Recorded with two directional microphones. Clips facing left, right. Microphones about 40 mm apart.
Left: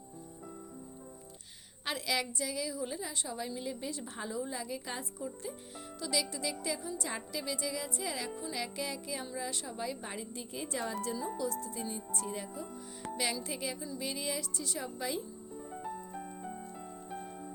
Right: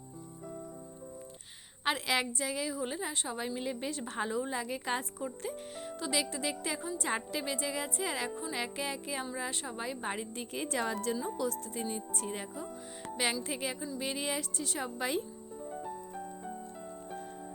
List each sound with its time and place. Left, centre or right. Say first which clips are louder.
1.8 s a woman's voice: right 3 dB; right
6.0 s a woman's voice: right 1 dB; right
10.5 s speech: right 3 dB; right
11.6 s a woman's voice: right 2 dB; right